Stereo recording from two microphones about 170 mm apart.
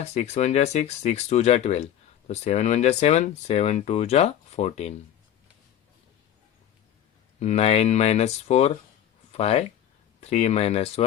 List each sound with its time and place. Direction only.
0.0 s speech: 40° left (ahead or behind)
7.3 s speech: 40° left (ahead or behind)